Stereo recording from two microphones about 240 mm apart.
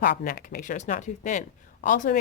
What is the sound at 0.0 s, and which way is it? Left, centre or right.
Speech, left.